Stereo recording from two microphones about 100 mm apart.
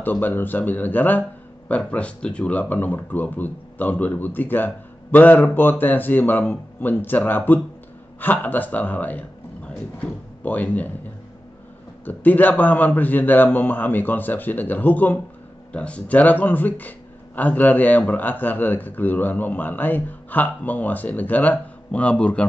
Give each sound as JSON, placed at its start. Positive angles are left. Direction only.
{"t": 0.0, "sound": "speech", "side_deg": 20}
{"t": 12.0, "sound": "speech", "side_deg": 15}